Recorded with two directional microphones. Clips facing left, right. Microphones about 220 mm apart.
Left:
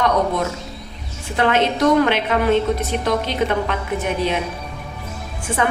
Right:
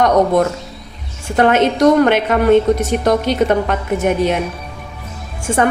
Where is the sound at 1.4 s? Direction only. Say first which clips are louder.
Right 5 dB; 45° right (ahead or behind).